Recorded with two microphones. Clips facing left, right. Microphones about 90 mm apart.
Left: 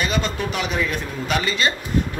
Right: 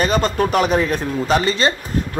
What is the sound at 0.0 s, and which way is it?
Speech, 40° right (ahead or behind).